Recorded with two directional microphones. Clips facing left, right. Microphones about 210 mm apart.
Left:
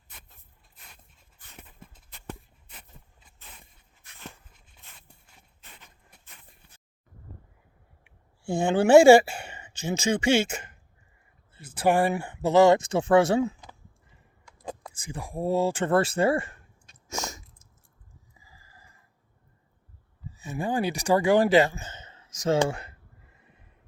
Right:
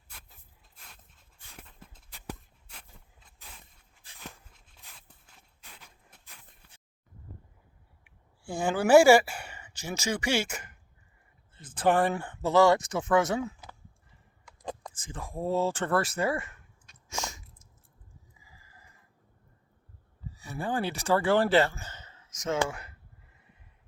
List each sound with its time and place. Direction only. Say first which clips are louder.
0.8 s dog: even; 5° left (ahead or behind)
1.5 s a sound: left 2 dB; 5° left (ahead or behind)
2.6 s walk: even; 5° left (ahead or behind)
8.0 s a sound: left 7 dB; 25° left (ahead or behind)
11.5 s speech: left 2 dB; 10° left (ahead or behind); by 13.6 s 30° left (ahead or behind)
14.6 s speech: left 1 dB; 10° left (ahead or behind)
16.0 s speech: left 8 dB; 30° left (ahead or behind)
17.1 s chewing: left 3 dB; 40° left (ahead or behind)
18.4 s a sound: left 2 dB; 35° left (ahead or behind)
20.3 s speech: left 4 dB; 20° left (ahead or behind)